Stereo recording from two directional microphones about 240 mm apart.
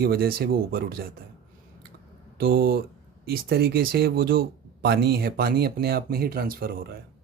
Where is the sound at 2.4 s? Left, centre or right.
Right.